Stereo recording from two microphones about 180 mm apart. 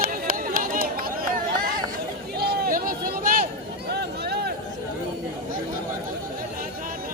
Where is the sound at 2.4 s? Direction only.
60° right (ahead or behind).